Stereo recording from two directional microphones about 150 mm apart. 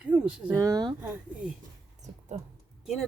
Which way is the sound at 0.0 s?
5° right (ahead or behind).